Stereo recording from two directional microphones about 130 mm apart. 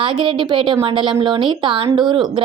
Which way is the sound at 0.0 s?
40° right (ahead or behind).